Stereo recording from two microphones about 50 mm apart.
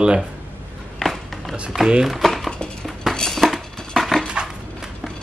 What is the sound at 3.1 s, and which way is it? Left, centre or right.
Music, centre.